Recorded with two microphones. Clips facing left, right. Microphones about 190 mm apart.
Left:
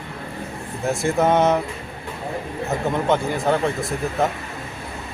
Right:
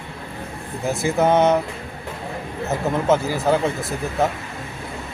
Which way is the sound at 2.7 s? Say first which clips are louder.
Right 2 dB; 5° right (ahead or behind).